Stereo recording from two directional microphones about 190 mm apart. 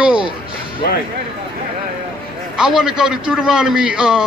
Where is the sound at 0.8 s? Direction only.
55° left (ahead or behind).